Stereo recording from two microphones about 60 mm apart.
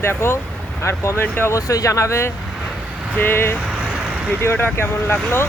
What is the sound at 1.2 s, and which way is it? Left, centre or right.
Speech, left.